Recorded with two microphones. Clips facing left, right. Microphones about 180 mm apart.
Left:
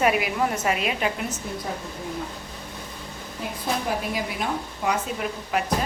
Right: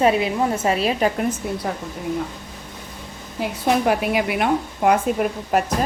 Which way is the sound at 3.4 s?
75° right (ahead or behind).